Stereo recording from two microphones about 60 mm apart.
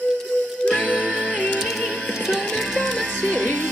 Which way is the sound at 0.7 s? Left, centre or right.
Left.